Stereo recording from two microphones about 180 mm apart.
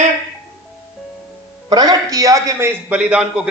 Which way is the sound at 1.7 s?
20° right (ahead or behind).